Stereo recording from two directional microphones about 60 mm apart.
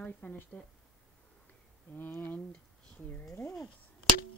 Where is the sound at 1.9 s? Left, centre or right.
Left.